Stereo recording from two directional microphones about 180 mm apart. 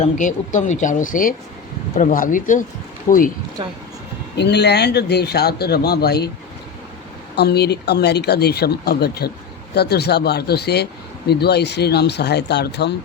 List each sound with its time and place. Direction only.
0.0 s speech: 45° left (ahead or behind)
4.4 s speech: 70° left (ahead or behind)
7.3 s speech: 65° left (ahead or behind)